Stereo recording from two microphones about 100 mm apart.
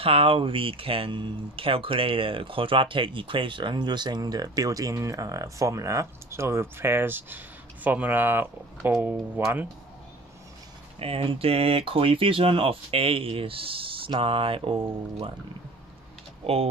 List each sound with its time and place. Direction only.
0.0 s speech: 65° right (ahead or behind); by 9.7 s 20° right (ahead or behind)
11.0 s speech: 70° right (ahead or behind)